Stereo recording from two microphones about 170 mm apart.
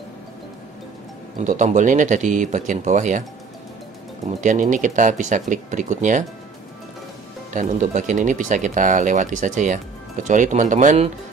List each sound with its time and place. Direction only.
1.4 s speech: 45° right (ahead or behind)
4.3 s speech: 45° right (ahead or behind)
7.5 s speech: 45° right (ahead or behind)